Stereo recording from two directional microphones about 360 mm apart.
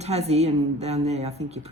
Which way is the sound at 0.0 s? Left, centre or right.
Centre.